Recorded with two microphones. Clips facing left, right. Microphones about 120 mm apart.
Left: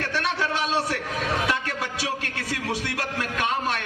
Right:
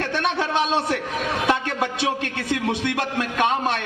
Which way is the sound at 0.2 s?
25° right (ahead or behind).